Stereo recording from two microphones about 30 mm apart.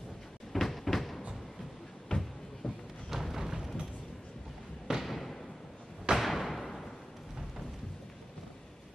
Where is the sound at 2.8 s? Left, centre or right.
Centre.